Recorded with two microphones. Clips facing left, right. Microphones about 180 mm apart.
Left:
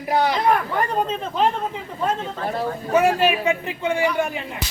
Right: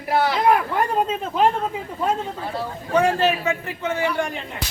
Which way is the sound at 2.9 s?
10° left (ahead or behind).